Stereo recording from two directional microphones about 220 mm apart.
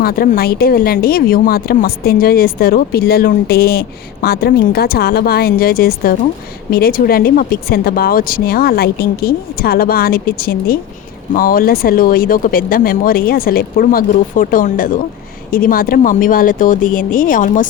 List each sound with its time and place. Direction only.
0.0 s speech: 40° left (ahead or behind)